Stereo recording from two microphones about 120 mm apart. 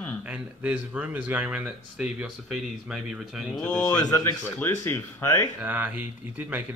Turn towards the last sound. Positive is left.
turn(degrees=-15)  # may be behind; listen again after turning